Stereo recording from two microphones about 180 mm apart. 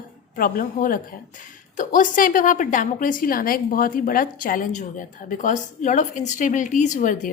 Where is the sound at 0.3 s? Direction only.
50° left (ahead or behind).